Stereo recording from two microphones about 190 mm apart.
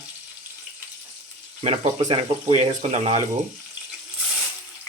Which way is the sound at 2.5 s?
30° right (ahead or behind).